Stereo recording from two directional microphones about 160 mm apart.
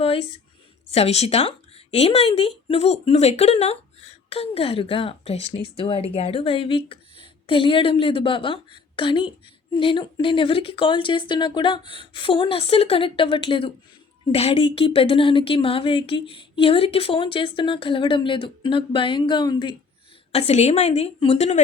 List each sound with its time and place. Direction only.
0.0 s a sound: 35° left (ahead or behind)
0.9 s a woman's voice: 40° left (ahead or behind)
20.3 s speech: 40° left (ahead or behind)